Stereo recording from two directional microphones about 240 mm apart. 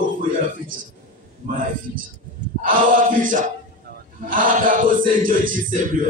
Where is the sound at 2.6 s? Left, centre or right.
Right.